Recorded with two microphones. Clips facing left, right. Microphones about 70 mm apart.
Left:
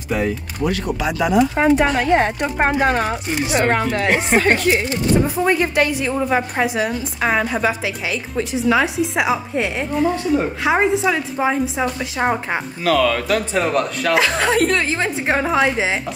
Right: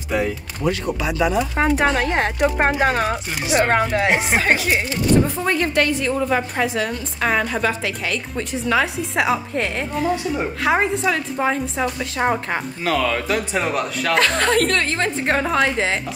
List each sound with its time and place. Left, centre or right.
1.5 s speech: centre
5.1 s a woman's voice: centre
12.8 s speech: right
13.5 s speech: centre
14.1 s a woman's voice: centre